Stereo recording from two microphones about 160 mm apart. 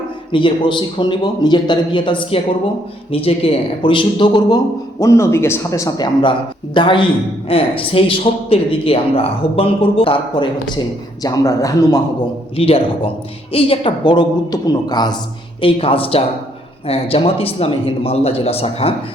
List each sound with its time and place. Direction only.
0.3 s a man's voice: 30° left (ahead or behind)
6.7 s a man's voice: 30° left (ahead or behind)
12.5 s a man's voice: 35° left (ahead or behind)